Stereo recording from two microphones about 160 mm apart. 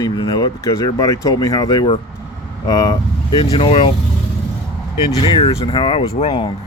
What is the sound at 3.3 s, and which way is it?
Speech, 35° left (ahead or behind).